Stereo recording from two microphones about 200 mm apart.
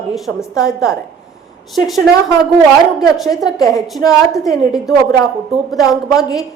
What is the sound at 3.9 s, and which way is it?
Speech, centre (ahead or behind).